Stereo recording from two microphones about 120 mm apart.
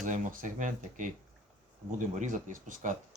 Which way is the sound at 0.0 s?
90° right.